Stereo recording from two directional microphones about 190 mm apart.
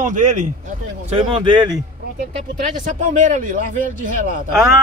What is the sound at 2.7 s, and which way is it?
Speech, 40° right (ahead or behind).